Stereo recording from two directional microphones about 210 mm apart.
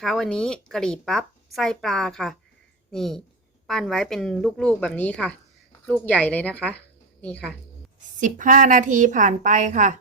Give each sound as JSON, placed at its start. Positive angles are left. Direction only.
{"t": 0.0, "sound": "a woman's voice", "side_deg": 0}
{"t": 8.2, "sound": "a woman's voice", "side_deg": -40}